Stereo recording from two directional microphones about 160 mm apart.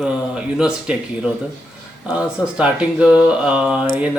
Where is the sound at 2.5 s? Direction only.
5° right (ahead or behind).